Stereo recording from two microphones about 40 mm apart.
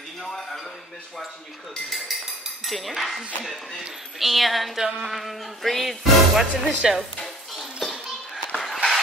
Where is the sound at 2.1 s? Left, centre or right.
Centre.